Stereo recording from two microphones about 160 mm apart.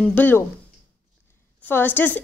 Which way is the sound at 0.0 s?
10° left (ahead or behind).